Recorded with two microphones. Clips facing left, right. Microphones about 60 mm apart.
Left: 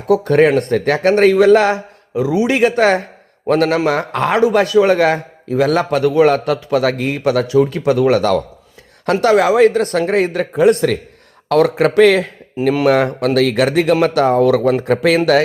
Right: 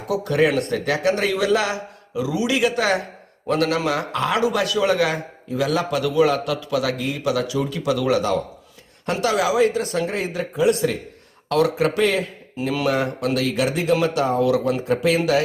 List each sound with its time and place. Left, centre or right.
0.1 s a man's voice: left
9.2 s speech: left
12.6 s speech: left
12.9 s speech: left